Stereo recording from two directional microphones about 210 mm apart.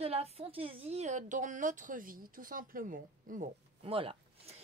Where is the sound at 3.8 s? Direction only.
25° right (ahead or behind).